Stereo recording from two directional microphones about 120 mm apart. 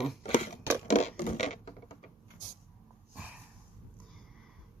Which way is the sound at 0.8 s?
75° left (ahead or behind).